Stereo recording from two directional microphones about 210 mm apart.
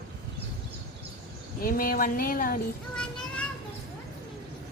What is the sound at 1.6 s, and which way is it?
Speech, 45° left (ahead or behind).